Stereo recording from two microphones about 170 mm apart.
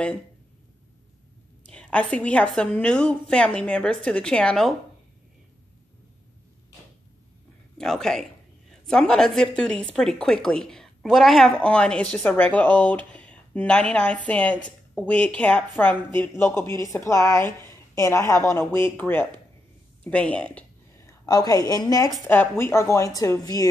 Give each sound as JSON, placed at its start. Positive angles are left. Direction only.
{"t": 1.7, "sound": "a woman's voice", "side_deg": 5}
{"t": 7.7, "sound": "a man's voice", "side_deg": 5}